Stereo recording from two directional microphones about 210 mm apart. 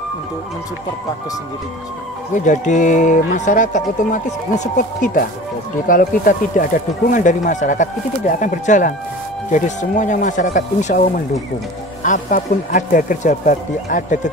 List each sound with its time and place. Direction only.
2.3 s speech: 35° left (ahead or behind)